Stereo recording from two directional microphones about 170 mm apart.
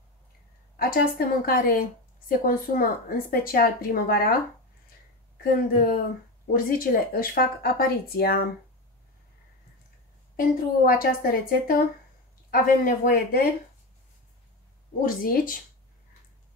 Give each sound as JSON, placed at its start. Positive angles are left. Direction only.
{"t": 0.7, "sound": "a woman's voice", "side_deg": 60}
{"t": 5.4, "sound": "a woman's voice", "side_deg": 60}
{"t": 10.3, "sound": "a woman's voice", "side_deg": 55}
{"t": 15.0, "sound": "speech", "side_deg": 55}